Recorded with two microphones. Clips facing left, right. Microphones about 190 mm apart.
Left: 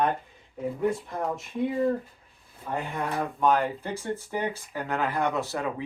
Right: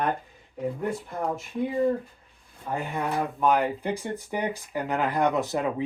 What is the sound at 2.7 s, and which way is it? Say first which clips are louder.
Speech: right 1 dB; 10° right (ahead or behind).